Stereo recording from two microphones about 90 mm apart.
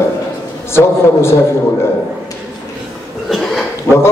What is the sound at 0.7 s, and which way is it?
Speech, 30° left (ahead or behind).